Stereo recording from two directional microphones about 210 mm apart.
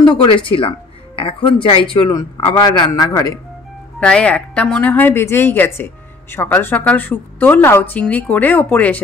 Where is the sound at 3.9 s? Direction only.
5° left (ahead or behind).